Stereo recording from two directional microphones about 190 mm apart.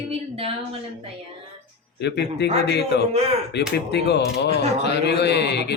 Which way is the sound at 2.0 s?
60° left (ahead or behind).